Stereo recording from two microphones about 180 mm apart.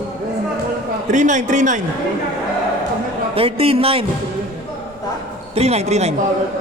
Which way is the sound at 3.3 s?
30° right (ahead or behind).